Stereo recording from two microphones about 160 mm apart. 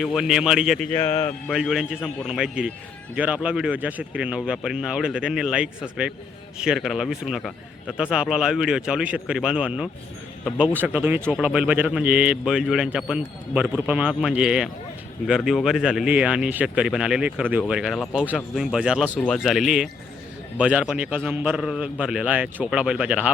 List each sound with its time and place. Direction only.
0.0 s a man's voice: 5° right (ahead or behind)
0.9 s speech: 15° left (ahead or behind)
1.5 s a man's voice: centre (ahead or behind)
19.1 s speech: 10° left (ahead or behind)
19.4 s a man's voice: centre (ahead or behind)